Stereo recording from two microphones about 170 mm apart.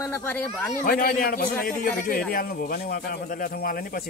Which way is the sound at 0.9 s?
55° left (ahead or behind).